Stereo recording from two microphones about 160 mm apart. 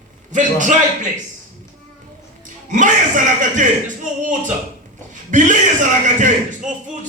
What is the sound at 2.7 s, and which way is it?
Speech, 50° right (ahead or behind).